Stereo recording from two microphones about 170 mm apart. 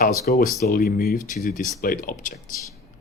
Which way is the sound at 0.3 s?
55° left (ahead or behind).